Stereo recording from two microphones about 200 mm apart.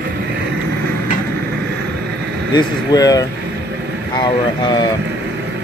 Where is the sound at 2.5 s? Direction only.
20° left (ahead or behind).